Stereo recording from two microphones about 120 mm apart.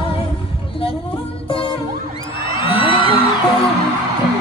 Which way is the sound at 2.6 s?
45° left (ahead or behind).